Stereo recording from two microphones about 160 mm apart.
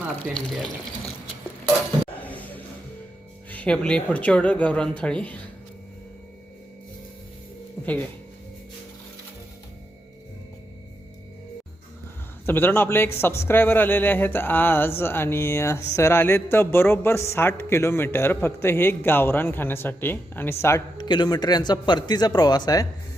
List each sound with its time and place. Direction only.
0.3 s speech: 5° left (ahead or behind)
2.2 s a sound: 10° left (ahead or behind)
3.5 s a man's voice: 5° left (ahead or behind)
12.5 s a man's voice: 15° left (ahead or behind)
21.0 s speech: 30° left (ahead or behind)